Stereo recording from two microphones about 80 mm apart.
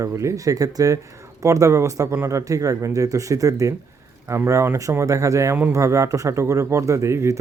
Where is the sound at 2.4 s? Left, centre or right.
Right.